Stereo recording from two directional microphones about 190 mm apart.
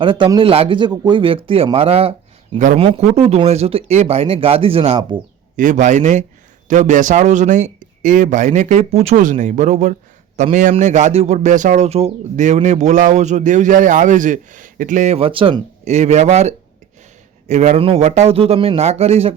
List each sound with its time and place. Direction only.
0.0 s speech: 25° right (ahead or behind)
2.6 s a man's voice: 40° right (ahead or behind)
5.5 s a man's voice: 40° right (ahead or behind)